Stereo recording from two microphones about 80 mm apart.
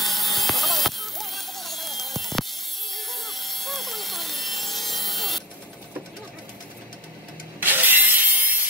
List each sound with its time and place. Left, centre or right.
0.0 s a sound: centre
2.9 s sawing: centre
7.6 s ratchet: right